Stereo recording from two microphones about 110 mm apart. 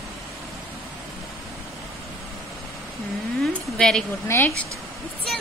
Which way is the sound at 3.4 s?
5° left (ahead or behind).